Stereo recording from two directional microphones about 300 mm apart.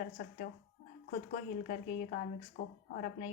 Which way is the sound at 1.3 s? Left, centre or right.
Left.